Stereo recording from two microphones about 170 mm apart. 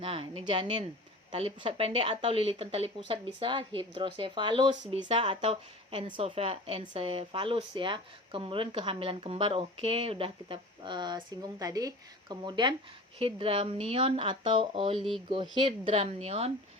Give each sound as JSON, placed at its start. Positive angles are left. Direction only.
{"t": 0.0, "sound": "speech", "side_deg": -35}